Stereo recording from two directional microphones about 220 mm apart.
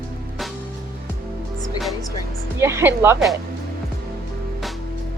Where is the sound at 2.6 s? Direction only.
10° right (ahead or behind).